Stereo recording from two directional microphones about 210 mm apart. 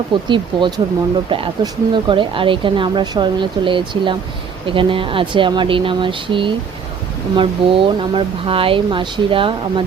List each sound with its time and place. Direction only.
0.3 s speech: 20° right (ahead or behind)